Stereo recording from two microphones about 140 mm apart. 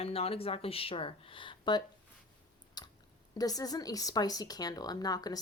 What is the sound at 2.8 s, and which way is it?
Chewing, 30° left (ahead or behind).